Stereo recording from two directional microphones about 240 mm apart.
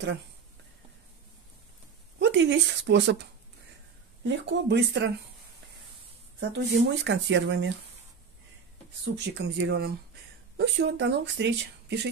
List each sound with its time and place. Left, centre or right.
2.1 s speech: right
4.2 s speech: right
6.4 s speech: right
9.0 s speech: right